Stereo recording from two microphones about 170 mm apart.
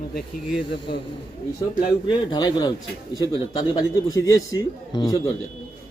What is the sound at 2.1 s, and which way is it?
A man's voice, 25° left (ahead or behind).